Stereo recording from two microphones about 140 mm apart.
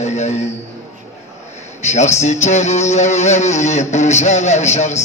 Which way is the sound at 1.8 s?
55° left (ahead or behind).